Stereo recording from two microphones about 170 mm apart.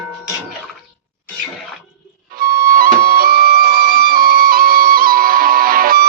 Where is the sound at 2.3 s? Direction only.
60° right (ahead or behind).